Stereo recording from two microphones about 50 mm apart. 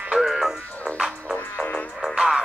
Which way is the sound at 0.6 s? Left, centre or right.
Left.